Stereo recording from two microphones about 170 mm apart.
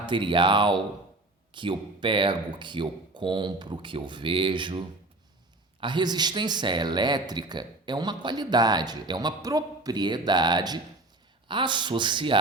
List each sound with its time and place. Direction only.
0.0 s speech: 30° right (ahead or behind)
5.8 s speech: 25° right (ahead or behind)